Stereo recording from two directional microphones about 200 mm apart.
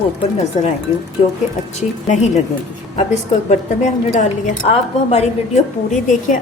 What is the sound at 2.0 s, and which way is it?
A woman's voice, 35° left (ahead or behind).